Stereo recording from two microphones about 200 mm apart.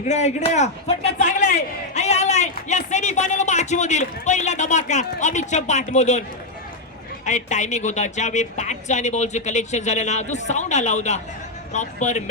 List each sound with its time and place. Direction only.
0.0 s a man's voice: 35° left (ahead or behind)
7.3 s a man's voice: 35° left (ahead or behind)